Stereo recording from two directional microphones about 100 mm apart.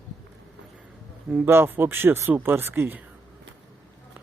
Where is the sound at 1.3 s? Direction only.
20° right (ahead or behind).